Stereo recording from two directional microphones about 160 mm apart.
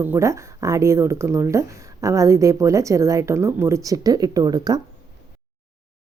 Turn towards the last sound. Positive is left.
turn(degrees=-25)  # may be behind; listen again after turning